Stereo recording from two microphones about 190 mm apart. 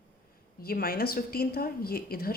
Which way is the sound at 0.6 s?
50° left (ahead or behind).